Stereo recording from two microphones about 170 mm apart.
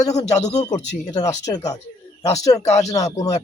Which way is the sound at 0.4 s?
20° left (ahead or behind).